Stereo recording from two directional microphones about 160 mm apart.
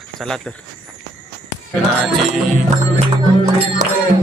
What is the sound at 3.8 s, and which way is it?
Music, 50° right (ahead or behind).